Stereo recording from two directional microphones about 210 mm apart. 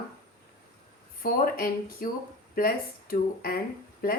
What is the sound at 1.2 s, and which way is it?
A woman's voice, 45° left (ahead or behind).